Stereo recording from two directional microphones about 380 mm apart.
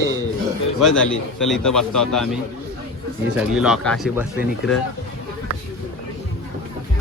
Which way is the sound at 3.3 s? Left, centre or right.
Centre.